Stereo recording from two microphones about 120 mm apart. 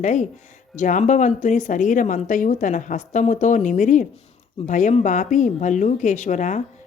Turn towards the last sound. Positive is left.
turn(degrees=90)